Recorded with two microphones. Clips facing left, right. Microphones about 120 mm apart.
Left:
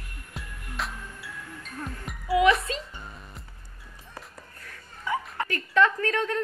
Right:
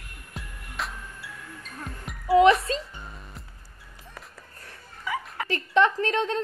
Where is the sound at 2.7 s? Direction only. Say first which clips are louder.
Right 4 dB; 35° right (ahead or behind).